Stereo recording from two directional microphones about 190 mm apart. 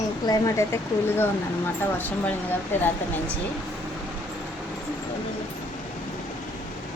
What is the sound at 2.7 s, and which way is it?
Speech, 10° left (ahead or behind).